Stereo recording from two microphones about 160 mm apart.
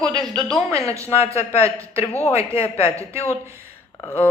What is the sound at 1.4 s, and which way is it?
Speech, 40° left (ahead or behind).